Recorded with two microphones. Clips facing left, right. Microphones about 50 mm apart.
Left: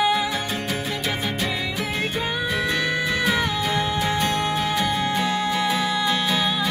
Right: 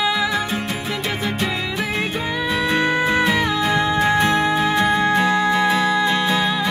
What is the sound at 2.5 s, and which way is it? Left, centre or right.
Music, right.